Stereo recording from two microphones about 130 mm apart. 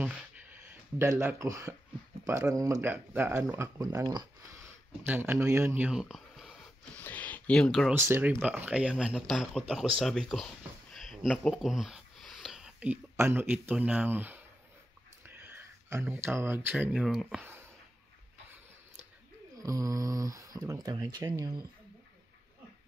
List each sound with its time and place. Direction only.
0.9 s speech: 20° right (ahead or behind)
2.5 s speech: 25° right (ahead or behind)
2.9 s speech: 15° right (ahead or behind); by 4.3 s 30° right (ahead or behind)
4.6 s speech: 15° right (ahead or behind)
5.9 s a sound: 5° right (ahead or behind)
6.8 s a sound: 15° left (ahead or behind)
7.9 s speech: 20° right (ahead or behind)
17.0 s speech: centre (ahead or behind)
19.6 s speech: 25° right (ahead or behind)